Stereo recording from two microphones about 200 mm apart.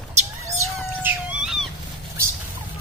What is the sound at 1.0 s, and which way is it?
Dog, 5° right (ahead or behind).